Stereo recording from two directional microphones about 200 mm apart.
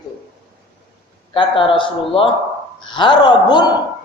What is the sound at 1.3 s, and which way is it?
A man's voice, 25° left (ahead or behind).